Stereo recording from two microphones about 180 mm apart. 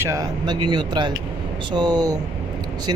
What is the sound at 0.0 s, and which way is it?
Speech, 20° right (ahead or behind).